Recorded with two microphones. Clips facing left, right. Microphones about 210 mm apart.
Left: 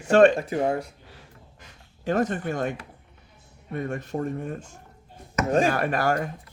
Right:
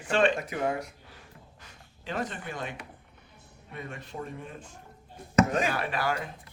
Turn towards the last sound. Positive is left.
turn(degrees=45)  # may be behind; listen again after turning